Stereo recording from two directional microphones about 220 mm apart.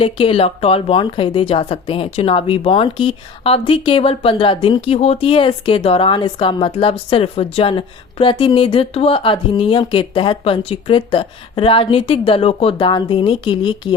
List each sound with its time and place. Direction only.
0.0 s speech: 25° left (ahead or behind)